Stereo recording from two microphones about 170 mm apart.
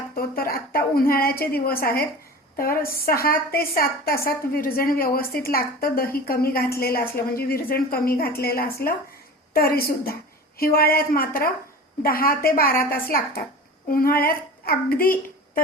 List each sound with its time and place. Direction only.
0.2 s a woman's voice: 60° left (ahead or behind)